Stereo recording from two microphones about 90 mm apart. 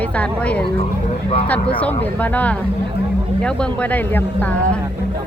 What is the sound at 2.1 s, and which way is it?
Speech, 15° left (ahead or behind).